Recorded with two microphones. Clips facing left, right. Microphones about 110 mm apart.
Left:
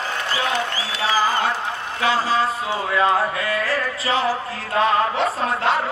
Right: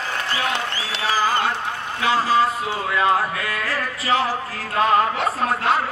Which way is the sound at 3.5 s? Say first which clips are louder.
Left 3 dB; 30° left (ahead or behind).